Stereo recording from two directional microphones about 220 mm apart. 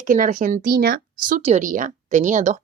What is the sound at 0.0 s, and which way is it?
Speech, 35° right (ahead or behind).